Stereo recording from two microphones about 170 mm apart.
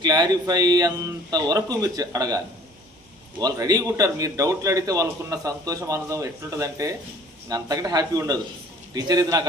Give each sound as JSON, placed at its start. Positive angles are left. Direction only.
{"t": 0.0, "sound": "a man's voice", "side_deg": -25}